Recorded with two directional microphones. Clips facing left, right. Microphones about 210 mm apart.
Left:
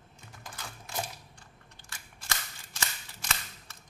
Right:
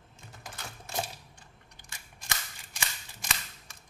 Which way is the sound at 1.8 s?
15° right (ahead or behind).